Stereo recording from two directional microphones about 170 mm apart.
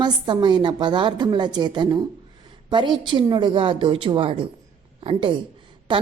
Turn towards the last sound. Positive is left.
turn(degrees=-30)  # may be behind; listen again after turning